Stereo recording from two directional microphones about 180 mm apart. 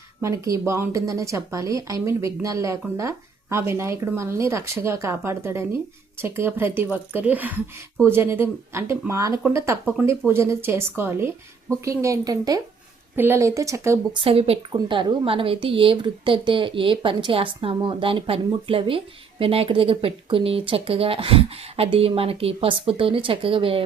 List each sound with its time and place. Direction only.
0.2 s a woman's voice: 15° right (ahead or behind)
14.2 s a woman's voice: 30° right (ahead or behind)